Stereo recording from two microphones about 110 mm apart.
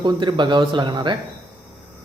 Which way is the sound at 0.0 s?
45° right (ahead or behind).